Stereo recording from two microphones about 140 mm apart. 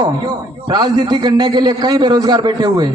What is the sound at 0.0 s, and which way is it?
A man's voice, 30° right (ahead or behind).